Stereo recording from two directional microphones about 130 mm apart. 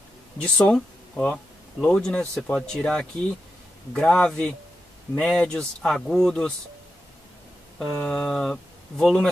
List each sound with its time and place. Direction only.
0.4 s speech: 5° left (ahead or behind)
7.8 s speech: 5° left (ahead or behind)